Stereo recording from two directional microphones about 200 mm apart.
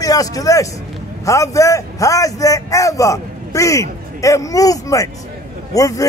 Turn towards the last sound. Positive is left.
turn(degrees=15)  # may be behind; listen again after turning